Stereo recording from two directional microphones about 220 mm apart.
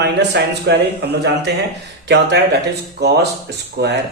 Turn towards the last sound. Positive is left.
turn(degrees=-50)  # may be behind; listen again after turning